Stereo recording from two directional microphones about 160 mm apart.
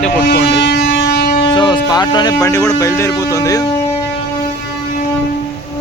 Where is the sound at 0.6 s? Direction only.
90° left.